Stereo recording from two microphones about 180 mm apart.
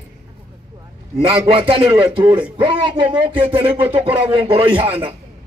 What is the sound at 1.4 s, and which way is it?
A man's voice, 30° right (ahead or behind).